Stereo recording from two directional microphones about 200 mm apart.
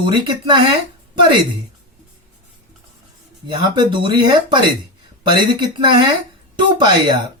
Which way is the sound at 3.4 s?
25° right (ahead or behind).